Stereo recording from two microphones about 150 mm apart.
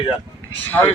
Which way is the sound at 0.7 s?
10° left (ahead or behind).